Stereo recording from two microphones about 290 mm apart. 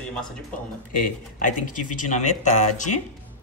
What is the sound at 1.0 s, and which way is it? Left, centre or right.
Speech, left.